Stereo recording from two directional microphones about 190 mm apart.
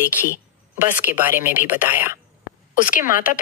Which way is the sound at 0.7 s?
10° right (ahead or behind).